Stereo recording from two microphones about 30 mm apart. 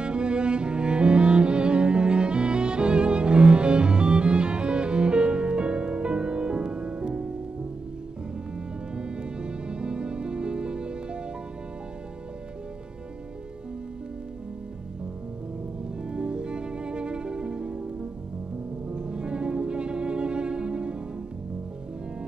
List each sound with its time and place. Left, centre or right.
0.0 s cello: right
8.9 s music: right
16.0 s music: right
18.9 s music: right